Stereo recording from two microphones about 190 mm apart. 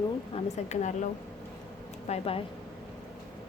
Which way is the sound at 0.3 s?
35° left (ahead or behind).